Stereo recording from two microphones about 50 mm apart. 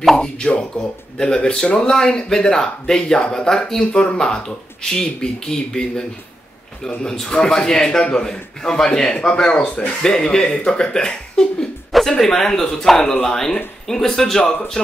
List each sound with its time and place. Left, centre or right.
0.2 s a man's voice: centre
11.9 s a man's voice: centre